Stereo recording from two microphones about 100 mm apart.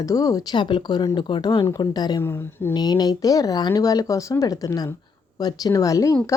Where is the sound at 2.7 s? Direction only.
45° left (ahead or behind).